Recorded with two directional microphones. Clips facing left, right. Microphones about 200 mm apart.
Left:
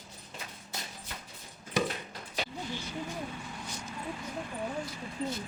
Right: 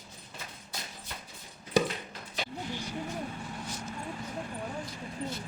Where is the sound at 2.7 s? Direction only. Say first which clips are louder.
Right 1 dB; 15° right (ahead or behind).